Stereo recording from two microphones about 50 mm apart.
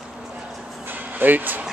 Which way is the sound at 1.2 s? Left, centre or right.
Right.